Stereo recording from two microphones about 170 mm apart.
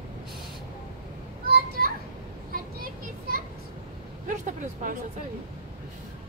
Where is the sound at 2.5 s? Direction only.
55° right (ahead or behind).